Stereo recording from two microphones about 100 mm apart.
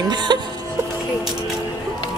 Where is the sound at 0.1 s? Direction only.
50° right (ahead or behind).